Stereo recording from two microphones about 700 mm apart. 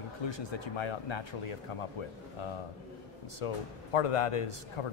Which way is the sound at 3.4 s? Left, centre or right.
Left.